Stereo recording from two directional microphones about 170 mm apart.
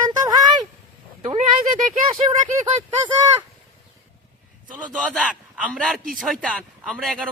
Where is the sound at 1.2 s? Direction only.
45° right (ahead or behind).